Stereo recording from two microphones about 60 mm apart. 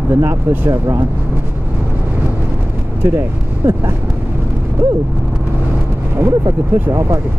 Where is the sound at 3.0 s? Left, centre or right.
Right.